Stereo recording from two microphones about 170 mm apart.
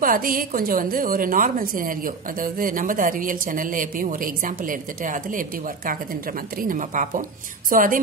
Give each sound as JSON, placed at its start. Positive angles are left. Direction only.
{"t": 0.0, "sound": "a woman's voice", "side_deg": -55}
{"t": 6.6, "sound": "speech", "side_deg": -50}